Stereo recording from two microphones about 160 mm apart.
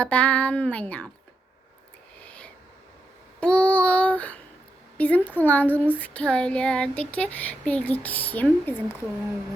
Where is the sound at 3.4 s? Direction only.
5° left (ahead or behind).